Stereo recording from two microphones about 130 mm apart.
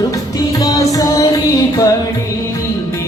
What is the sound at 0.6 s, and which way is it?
Music, 25° left (ahead or behind).